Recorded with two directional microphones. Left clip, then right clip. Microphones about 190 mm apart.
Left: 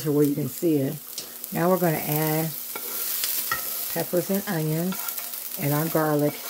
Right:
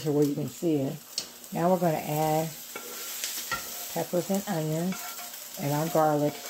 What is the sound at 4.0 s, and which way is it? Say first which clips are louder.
Frying: left 2 dB; 40° left (ahead or behind).